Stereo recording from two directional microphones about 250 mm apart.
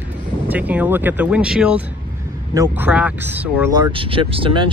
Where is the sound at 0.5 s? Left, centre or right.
Centre.